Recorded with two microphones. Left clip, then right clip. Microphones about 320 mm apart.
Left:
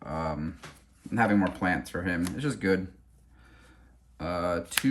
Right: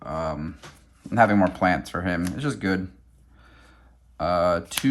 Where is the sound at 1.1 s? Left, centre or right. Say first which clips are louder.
Right 7 dB; centre.